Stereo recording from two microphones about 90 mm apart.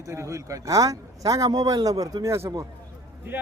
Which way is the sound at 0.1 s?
35° right (ahead or behind).